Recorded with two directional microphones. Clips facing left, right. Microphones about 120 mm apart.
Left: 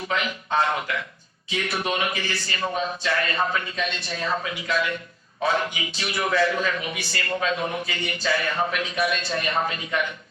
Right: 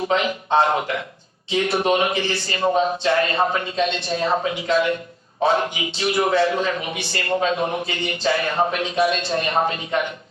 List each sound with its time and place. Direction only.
0.0 s a man's voice: 30° right (ahead or behind)